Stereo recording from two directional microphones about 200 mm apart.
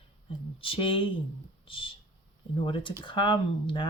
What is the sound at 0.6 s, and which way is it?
Speech, 25° left (ahead or behind).